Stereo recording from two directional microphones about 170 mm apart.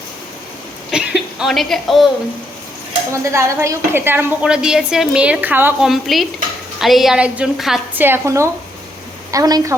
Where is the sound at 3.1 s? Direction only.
15° right (ahead or behind).